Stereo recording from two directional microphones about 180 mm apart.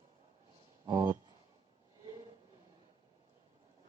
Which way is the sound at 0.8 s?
20° right (ahead or behind).